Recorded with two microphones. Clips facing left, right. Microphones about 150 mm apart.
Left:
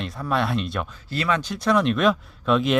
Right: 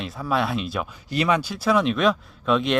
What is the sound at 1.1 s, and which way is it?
Speech, 15° right (ahead or behind).